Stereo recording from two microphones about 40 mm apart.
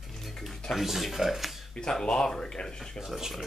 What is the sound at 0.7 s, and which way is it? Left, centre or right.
Speech, centre.